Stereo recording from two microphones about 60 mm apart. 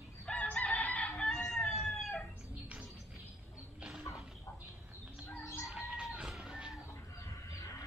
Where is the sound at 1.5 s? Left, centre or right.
Centre.